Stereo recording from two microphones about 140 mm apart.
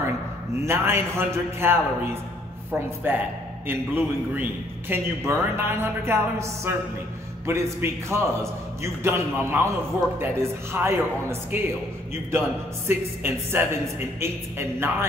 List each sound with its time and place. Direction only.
0.7 s a man's voice: 20° right (ahead or behind)